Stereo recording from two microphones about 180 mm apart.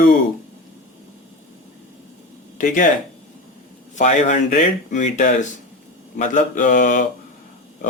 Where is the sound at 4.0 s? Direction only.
40° left (ahead or behind).